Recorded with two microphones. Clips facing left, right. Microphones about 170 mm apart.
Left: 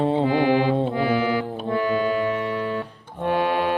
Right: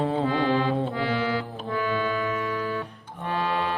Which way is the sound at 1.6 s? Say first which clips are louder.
Left 5 dB; 40° left (ahead or behind).